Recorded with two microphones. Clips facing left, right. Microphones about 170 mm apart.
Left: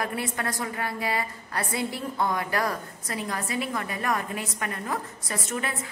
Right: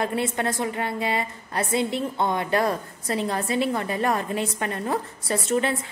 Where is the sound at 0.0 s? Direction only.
25° right (ahead or behind).